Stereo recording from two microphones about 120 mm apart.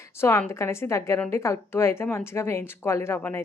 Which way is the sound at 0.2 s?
20° left (ahead or behind).